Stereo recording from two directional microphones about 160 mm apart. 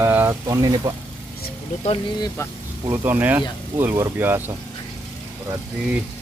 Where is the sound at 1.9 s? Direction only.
25° left (ahead or behind).